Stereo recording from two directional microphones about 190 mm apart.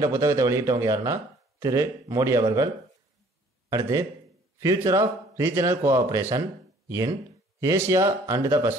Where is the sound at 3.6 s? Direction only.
15° right (ahead or behind).